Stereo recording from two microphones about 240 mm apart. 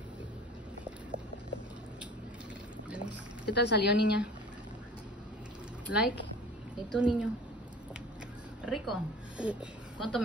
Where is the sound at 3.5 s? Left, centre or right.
Left.